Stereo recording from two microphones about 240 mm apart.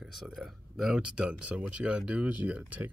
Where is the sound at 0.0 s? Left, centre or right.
Centre.